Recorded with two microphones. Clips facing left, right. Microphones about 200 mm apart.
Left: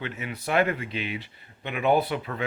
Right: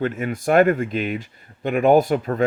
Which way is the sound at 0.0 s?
45° right (ahead or behind).